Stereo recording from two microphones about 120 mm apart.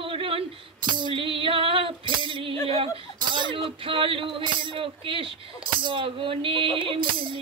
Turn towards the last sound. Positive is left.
turn(degrees=-45)  # may be behind; listen again after turning